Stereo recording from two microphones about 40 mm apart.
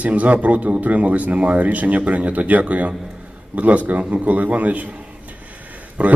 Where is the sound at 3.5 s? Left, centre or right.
Right.